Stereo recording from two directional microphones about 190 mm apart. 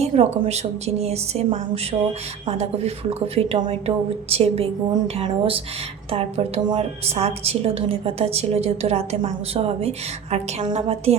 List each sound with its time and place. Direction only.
0.0 s a woman's voice: 35° right (ahead or behind)